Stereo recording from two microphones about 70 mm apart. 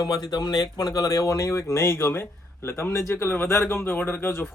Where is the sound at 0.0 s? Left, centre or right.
Left.